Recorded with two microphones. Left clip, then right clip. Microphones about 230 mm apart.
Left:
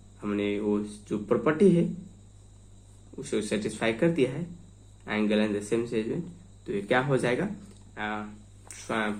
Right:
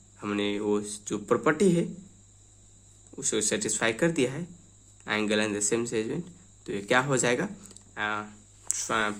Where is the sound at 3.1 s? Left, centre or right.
Right.